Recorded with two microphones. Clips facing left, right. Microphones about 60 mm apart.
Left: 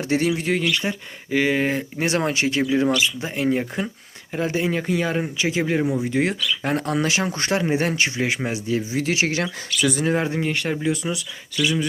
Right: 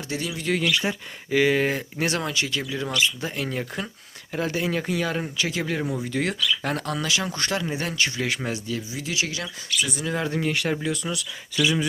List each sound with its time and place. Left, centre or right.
0.1 s speech: left
0.7 s speech: centre
2.1 s speech: left
2.8 s speech: centre
8.6 s speech: left
9.1 s speech: left
10.2 s speech: centre
10.5 s speech: centre
10.8 s speech: centre
11.5 s speech: right